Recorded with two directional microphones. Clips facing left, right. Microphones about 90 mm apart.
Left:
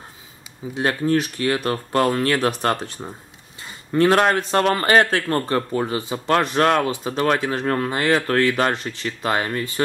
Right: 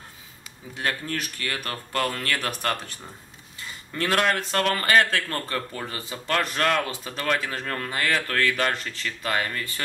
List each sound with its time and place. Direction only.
0.7 s a man's voice: 25° left (ahead or behind)